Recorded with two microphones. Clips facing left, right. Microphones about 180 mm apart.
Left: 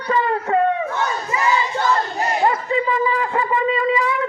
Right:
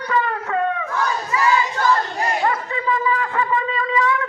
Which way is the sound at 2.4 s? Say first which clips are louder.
Left 3 dB; 25° left (ahead or behind).